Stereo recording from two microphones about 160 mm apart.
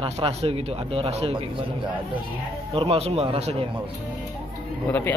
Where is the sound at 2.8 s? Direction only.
40° right (ahead or behind).